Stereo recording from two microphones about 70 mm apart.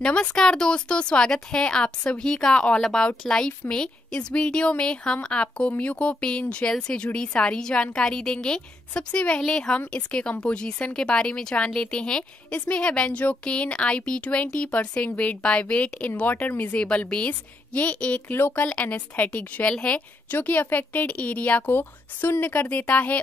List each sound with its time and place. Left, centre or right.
0.0 s a woman's voice: centre
18.3 s speech: left
18.6 s a woman's voice: left
20.2 s a woman's voice: left